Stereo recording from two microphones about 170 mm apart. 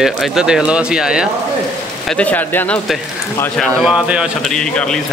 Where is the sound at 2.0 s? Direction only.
5° left (ahead or behind).